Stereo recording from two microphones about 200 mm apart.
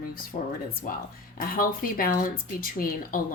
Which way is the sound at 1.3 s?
45° left (ahead or behind).